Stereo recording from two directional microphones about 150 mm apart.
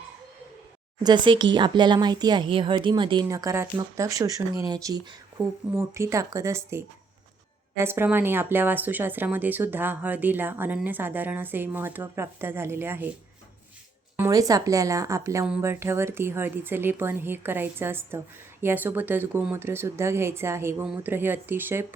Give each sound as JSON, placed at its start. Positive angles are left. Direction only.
{"t": 1.0, "sound": "speech", "side_deg": -30}
{"t": 3.2, "sound": "a woman's voice", "side_deg": -20}
{"t": 14.2, "sound": "a woman's voice", "side_deg": -25}